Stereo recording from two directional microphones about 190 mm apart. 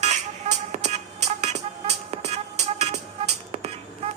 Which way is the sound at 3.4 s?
35° right (ahead or behind).